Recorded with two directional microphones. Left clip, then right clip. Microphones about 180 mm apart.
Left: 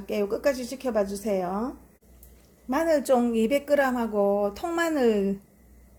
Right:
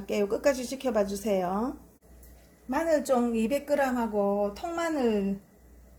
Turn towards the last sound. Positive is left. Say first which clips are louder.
# left 4 dB
turn(degrees=40)  # may be behind; listen again after turning